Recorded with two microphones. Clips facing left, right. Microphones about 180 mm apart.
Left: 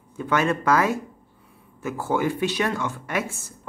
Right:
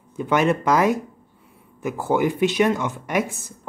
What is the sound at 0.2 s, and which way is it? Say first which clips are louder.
Speech: right 3 dB; 20° right (ahead or behind).